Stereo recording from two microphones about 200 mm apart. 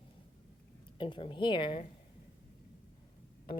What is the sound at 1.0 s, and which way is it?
Speech, 25° left (ahead or behind).